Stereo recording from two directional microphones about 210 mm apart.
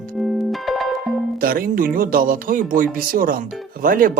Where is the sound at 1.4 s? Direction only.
45° right (ahead or behind).